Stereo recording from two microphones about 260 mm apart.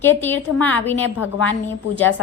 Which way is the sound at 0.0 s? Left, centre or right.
Centre.